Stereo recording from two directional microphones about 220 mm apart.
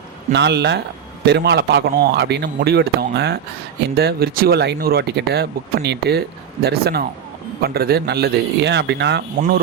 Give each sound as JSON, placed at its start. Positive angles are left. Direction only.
{"t": 0.3, "sound": "speech", "side_deg": -50}